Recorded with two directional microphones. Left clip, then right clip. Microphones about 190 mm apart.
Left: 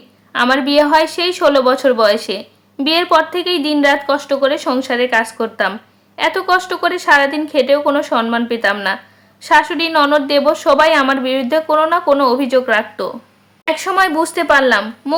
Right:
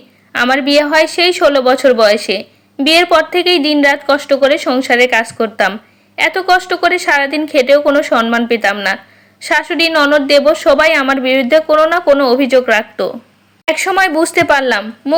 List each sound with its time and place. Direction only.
0.3 s a woman's voice: 10° right (ahead or behind)
15.1 s speech: 5° right (ahead or behind)